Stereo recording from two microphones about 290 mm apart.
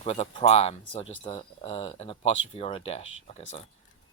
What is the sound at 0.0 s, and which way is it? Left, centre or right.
Speech, centre.